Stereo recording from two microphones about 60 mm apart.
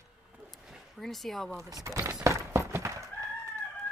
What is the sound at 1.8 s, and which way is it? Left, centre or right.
Speech, right.